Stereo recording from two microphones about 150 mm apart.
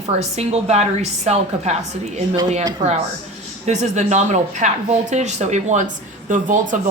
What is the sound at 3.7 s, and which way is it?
A woman's voice, 50° right (ahead or behind).